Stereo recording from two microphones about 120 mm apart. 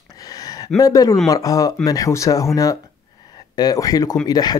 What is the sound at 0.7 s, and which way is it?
Speech, 30° left (ahead or behind).